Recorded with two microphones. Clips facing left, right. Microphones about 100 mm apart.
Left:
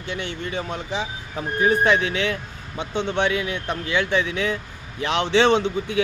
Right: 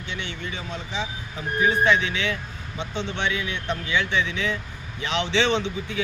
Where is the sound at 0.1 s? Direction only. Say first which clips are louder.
Left 5 dB; 50° left (ahead or behind).